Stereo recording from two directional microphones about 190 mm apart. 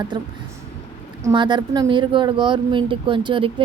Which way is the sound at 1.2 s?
25° right (ahead or behind).